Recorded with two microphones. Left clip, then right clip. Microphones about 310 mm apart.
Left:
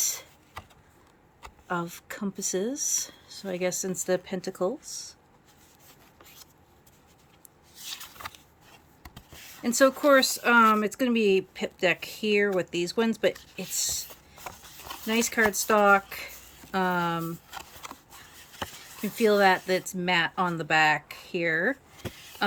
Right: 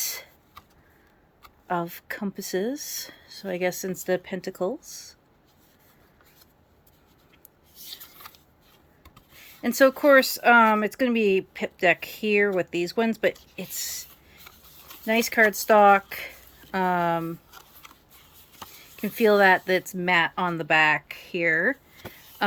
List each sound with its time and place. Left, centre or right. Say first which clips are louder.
1.6 s speech: right 4 dB; centre
2.3 s speech: right 1 dB; right
3.3 s speech: right 2 dB; centre
9.6 s speech: right 3 dB; centre
15.0 s speech: right 4 dB; centre
19.0 s speech: right 3 dB; centre